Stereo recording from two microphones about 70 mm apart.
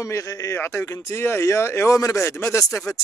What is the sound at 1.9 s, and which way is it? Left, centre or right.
Speech, left.